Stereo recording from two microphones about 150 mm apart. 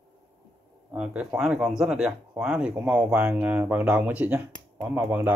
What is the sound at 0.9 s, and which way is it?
Speech, 5° right (ahead or behind).